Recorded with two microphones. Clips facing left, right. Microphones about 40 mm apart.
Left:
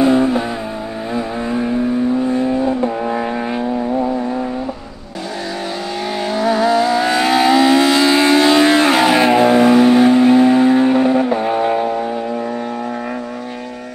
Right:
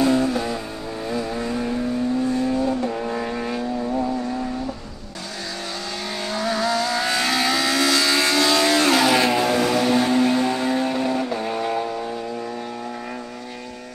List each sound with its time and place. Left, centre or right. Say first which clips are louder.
0.0 s vehicle: left 6 dB; left
6.2 s vehicle: left 8 dB; centre